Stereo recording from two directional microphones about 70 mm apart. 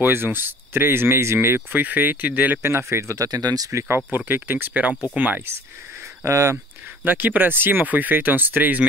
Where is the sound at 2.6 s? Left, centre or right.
Right.